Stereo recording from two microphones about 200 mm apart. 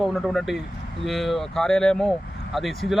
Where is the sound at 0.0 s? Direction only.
Centre (ahead or behind).